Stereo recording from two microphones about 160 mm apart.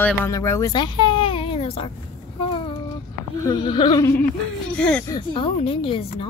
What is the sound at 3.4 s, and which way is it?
Speech, 30° left (ahead or behind).